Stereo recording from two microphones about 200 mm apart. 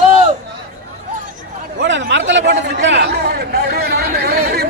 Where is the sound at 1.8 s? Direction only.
65° right (ahead or behind).